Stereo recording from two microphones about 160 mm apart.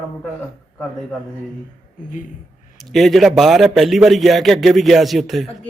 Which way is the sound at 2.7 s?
Centre (ahead or behind).